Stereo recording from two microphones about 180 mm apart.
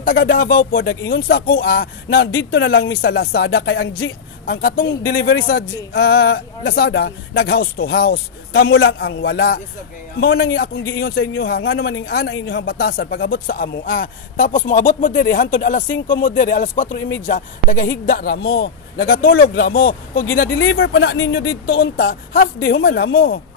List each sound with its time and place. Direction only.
0.0 s speech: 55° left (ahead or behind)
2.3 s speech: 90° left; by 20.2 s 55° left (ahead or behind)
20.5 s speech: 80° left; by 23.4 s 60° left (ahead or behind)